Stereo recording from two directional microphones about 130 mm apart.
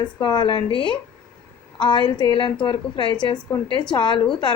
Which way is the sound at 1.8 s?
35° left (ahead or behind).